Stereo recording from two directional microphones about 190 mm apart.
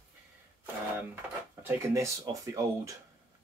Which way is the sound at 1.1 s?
10° right (ahead or behind).